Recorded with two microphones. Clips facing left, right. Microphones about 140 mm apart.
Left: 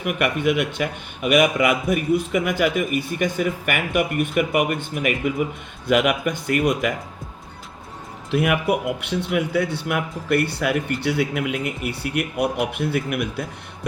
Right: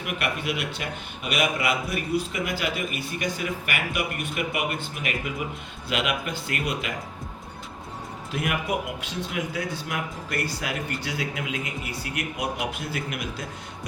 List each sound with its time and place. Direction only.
0.0 s a man's voice: 50° left (ahead or behind)
8.3 s speech: 65° left (ahead or behind)